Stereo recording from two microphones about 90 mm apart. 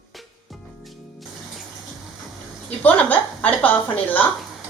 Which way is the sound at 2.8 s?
15° left (ahead or behind).